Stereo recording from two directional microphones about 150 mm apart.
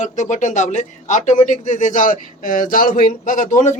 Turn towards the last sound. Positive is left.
turn(degrees=55)  # may be behind; listen again after turning